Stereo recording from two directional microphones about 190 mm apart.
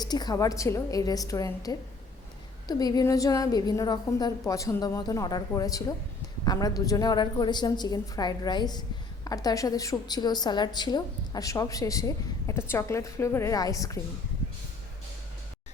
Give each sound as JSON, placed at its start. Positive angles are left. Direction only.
{"t": 0.0, "sound": "a woman's voice", "side_deg": 20}